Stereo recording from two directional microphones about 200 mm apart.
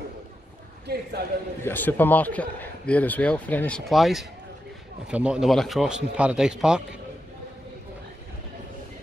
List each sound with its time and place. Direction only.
0.9 s a man's voice: 50° right (ahead or behind)
1.6 s a man's voice: 10° left (ahead or behind)